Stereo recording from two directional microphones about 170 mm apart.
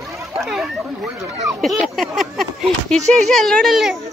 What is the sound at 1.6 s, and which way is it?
Speech, centre (ahead or behind).